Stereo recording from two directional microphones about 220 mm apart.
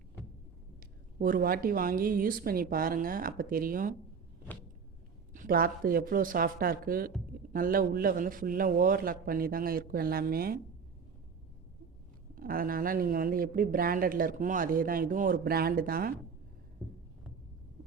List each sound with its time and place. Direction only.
1.2 s speech: 40° right (ahead or behind)
5.3 s speech: 40° right (ahead or behind)
12.3 s speech: 40° right (ahead or behind)